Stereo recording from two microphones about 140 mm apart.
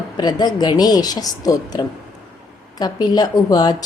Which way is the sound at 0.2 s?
30° left (ahead or behind).